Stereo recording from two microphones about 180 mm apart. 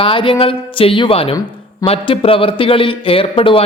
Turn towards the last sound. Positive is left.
turn(degrees=30)  # may be behind; listen again after turning